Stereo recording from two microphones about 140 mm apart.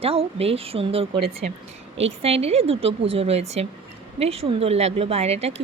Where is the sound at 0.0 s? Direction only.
45° right (ahead or behind).